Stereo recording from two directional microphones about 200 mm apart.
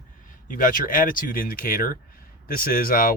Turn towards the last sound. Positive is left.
turn(degrees=45)  # may be behind; listen again after turning